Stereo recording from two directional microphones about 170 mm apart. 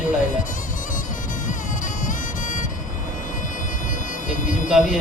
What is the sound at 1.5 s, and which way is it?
Music, 50° left (ahead or behind).